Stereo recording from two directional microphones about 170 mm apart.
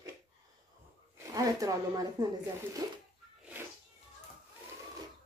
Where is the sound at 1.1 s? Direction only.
20° right (ahead or behind).